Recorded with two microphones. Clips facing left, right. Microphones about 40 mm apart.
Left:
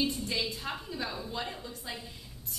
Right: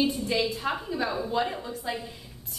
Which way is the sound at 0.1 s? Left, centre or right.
Centre.